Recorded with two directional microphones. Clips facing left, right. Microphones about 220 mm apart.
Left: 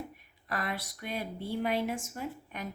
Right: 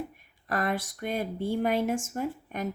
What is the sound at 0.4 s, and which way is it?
Speech, 45° right (ahead or behind).